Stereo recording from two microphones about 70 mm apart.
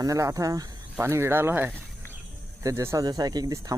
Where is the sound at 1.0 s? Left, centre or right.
Right.